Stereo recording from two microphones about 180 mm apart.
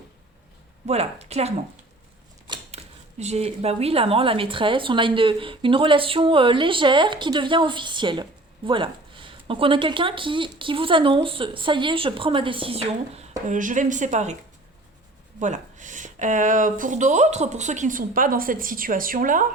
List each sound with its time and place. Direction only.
0.9 s a woman's voice: 35° right (ahead or behind)
15.4 s speech: 40° right (ahead or behind)